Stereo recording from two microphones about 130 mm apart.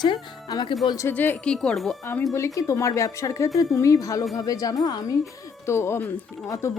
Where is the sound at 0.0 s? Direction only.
30° left (ahead or behind).